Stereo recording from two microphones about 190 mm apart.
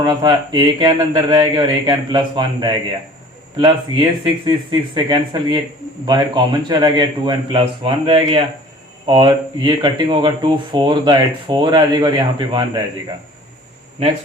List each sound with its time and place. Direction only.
0.0 s speech: 20° right (ahead or behind)